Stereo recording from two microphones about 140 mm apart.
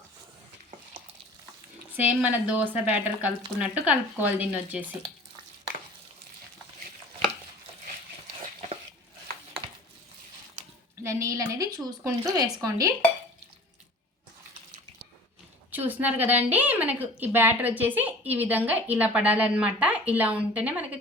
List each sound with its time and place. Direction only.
2.0 s speech: 10° right (ahead or behind)
10.6 s a sound: 50° right (ahead or behind)
11.0 s a woman's voice: 20° right (ahead or behind)
15.7 s speech: 15° right (ahead or behind)